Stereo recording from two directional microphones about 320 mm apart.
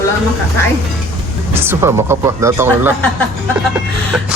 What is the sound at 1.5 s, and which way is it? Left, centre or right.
Speech, centre.